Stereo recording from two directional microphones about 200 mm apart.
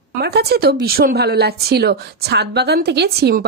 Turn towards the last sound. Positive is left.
turn(degrees=-55)  # may be behind; listen again after turning